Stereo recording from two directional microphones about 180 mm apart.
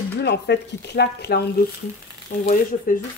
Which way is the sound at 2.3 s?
55° left (ahead or behind).